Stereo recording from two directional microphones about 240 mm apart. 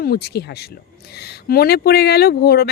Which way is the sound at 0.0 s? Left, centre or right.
Left.